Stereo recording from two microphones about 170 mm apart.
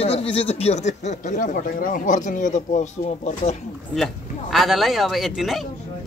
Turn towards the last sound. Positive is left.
turn(degrees=0)  # may be behind; listen again after turning